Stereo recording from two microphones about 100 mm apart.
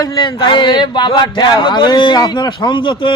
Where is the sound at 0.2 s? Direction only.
50° left (ahead or behind).